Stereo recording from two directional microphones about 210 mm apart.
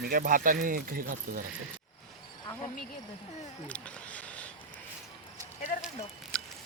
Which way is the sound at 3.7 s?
5° left (ahead or behind).